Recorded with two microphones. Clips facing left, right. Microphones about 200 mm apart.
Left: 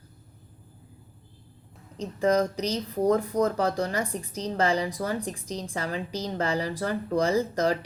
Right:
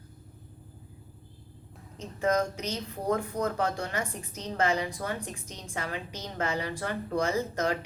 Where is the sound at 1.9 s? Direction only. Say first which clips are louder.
Left 4 dB; 35° left (ahead or behind).